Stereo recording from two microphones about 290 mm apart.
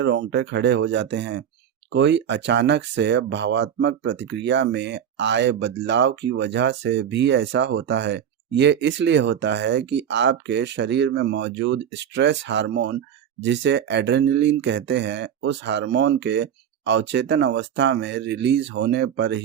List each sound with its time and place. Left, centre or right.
0.0 s speech: right